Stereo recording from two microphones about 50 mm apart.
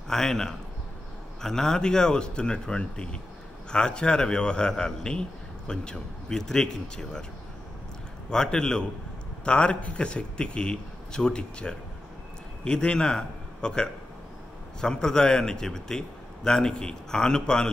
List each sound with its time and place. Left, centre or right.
0.1 s a man's voice: centre
8.3 s a man's voice: centre